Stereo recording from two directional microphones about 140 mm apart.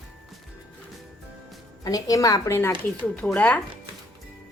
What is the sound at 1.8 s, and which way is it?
Speech, 25° left (ahead or behind).